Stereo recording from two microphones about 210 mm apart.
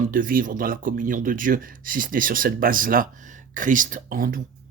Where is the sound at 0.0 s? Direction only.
40° right (ahead or behind).